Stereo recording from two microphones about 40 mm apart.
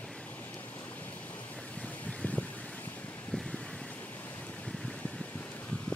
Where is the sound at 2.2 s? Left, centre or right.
Left.